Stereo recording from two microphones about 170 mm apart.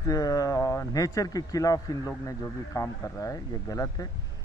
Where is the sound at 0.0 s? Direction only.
20° left (ahead or behind).